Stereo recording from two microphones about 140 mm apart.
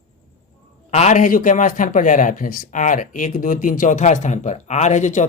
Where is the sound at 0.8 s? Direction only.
55° left (ahead or behind).